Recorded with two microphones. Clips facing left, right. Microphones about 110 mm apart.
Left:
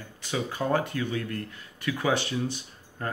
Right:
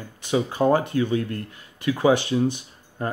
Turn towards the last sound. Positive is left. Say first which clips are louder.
# right 6 dB
turn(degrees=-20)  # may be behind; listen again after turning